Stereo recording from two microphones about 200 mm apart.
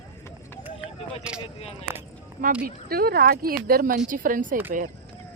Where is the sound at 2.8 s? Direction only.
50° right (ahead or behind).